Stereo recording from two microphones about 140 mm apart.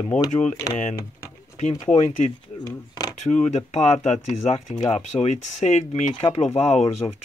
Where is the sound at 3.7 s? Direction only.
50° left (ahead or behind).